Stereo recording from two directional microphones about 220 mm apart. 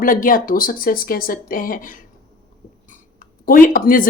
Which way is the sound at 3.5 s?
40° left (ahead or behind).